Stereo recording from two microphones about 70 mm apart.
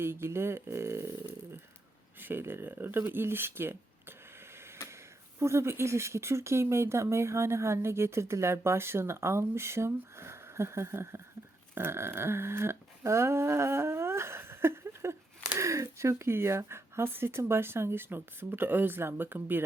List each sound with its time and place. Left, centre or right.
0.0 s speech: right
2.2 s speech: right
5.4 s speech: right
11.7 s a sound: right
15.5 s speech: right